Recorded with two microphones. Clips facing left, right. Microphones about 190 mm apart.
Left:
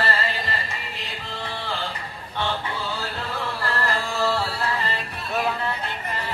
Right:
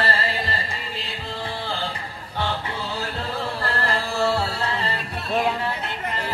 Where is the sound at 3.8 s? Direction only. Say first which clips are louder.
Right 2 dB; 25° right (ahead or behind).